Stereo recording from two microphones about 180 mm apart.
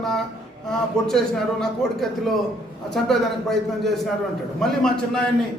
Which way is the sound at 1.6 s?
Centre (ahead or behind).